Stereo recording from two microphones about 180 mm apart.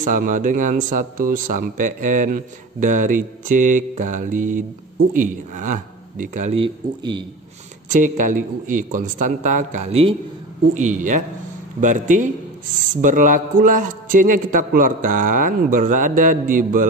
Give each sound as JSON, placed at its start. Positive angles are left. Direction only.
{"t": 0.0, "sound": "a man's voice", "side_deg": -45}
{"t": 6.6, "sound": "speech", "side_deg": -25}
{"t": 7.9, "sound": "a man's voice", "side_deg": -45}